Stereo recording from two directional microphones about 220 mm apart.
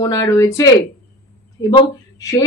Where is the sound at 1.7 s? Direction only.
15° left (ahead or behind).